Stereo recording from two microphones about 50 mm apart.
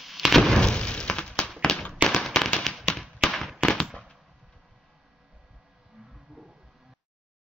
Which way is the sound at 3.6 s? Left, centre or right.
Centre.